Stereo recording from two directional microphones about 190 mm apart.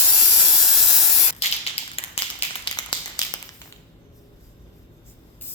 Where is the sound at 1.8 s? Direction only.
30° left (ahead or behind).